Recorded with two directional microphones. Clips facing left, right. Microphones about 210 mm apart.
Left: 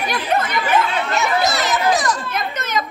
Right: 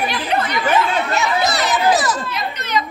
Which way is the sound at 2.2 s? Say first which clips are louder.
Left 1 dB; 50° left (ahead or behind).